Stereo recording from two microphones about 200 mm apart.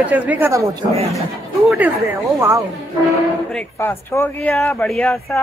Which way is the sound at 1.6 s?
10° right (ahead or behind).